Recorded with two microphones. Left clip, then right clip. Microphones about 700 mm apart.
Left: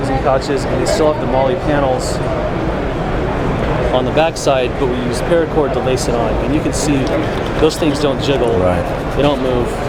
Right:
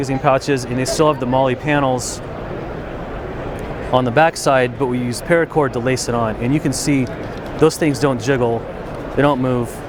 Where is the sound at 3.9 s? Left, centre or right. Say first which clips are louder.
Right 3 dB; right.